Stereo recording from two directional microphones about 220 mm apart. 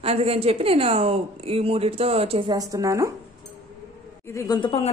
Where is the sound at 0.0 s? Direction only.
25° right (ahead or behind).